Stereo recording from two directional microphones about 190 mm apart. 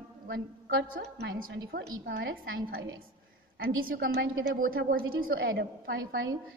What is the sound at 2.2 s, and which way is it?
A woman's voice, 90° right.